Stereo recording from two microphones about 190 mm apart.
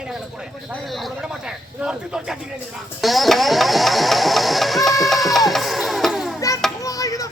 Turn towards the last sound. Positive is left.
turn(degrees=15)  # may be behind; listen again after turning